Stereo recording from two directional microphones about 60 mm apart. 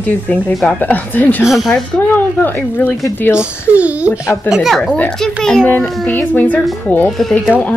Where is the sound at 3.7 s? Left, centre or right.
Right.